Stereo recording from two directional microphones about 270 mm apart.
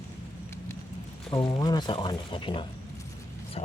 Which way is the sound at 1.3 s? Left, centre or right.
Centre.